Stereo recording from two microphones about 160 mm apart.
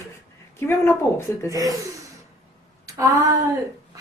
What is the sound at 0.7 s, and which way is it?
Speech, 15° left (ahead or behind).